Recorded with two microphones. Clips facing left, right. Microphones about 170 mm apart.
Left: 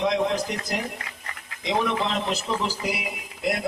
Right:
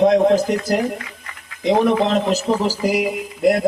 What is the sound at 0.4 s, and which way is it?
Speech, 45° right (ahead or behind).